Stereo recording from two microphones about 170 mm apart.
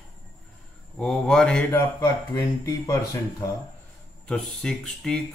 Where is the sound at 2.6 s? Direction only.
20° left (ahead or behind).